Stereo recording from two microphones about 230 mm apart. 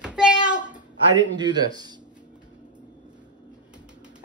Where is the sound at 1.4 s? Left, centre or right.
Centre.